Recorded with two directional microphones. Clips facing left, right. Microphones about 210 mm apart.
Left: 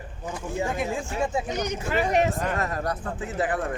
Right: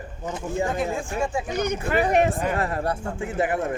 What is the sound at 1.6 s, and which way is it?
Speech, 55° right (ahead or behind).